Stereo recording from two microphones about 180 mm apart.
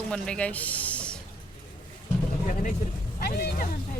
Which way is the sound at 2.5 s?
45° left (ahead or behind).